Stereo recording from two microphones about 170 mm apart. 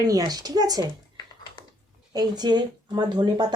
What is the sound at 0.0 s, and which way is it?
Speech, 20° right (ahead or behind).